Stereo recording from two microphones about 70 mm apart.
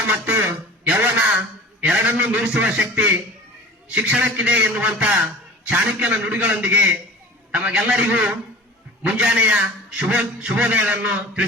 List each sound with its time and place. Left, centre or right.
0.1 s a man's voice: right